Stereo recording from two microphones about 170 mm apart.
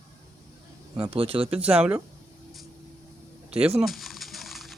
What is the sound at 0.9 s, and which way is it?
Speech, 30° right (ahead or behind).